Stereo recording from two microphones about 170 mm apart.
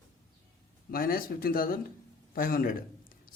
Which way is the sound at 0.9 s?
60° left (ahead or behind).